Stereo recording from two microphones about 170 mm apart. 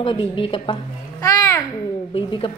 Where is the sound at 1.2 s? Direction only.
20° left (ahead or behind).